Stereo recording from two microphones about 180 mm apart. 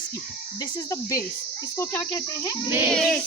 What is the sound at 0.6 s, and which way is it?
Speech, 20° left (ahead or behind).